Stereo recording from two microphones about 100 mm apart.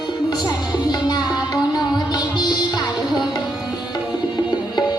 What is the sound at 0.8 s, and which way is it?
Music, 45° left (ahead or behind).